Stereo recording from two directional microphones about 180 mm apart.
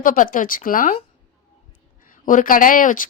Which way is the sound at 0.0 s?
50° left (ahead or behind).